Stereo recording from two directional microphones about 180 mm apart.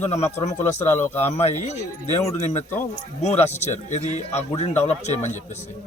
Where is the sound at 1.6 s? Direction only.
40° left (ahead or behind).